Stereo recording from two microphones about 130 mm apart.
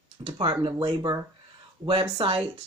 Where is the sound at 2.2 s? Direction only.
40° right (ahead or behind).